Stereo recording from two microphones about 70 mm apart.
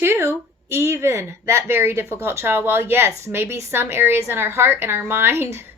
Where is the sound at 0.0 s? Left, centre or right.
Right.